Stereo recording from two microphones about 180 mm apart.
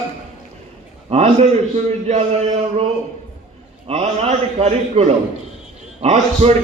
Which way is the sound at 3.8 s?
35° right (ahead or behind).